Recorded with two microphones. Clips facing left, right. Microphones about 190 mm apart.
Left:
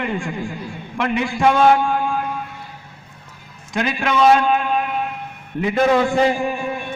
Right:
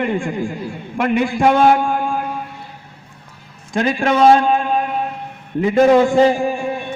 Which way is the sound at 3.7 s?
35° right (ahead or behind).